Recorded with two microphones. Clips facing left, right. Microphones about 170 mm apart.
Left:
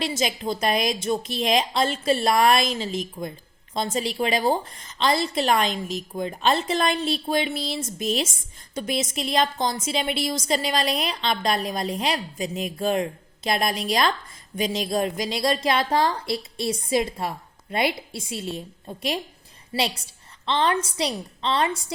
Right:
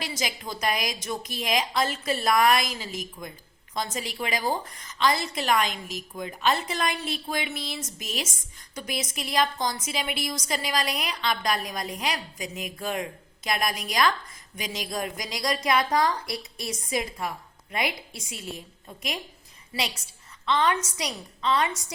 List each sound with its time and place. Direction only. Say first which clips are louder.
0.0 s a woman's voice: left 7 dB; 25° left (ahead or behind)
20.4 s a woman's voice: left 2 dB; 30° left (ahead or behind)